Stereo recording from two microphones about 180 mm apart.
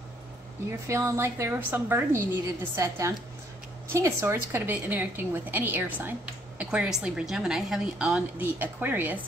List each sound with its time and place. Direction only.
0.7 s a woman's voice: 15° right (ahead or behind)